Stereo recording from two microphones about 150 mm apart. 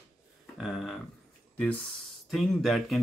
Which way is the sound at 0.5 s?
Centre (ahead or behind).